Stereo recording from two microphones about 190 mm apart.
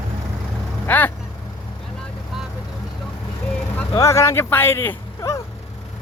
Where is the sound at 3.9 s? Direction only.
15° left (ahead or behind).